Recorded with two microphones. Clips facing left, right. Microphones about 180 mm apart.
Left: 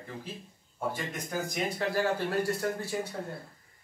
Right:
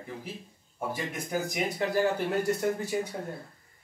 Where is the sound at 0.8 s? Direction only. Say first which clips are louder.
Right 1 dB; 10° right (ahead or behind).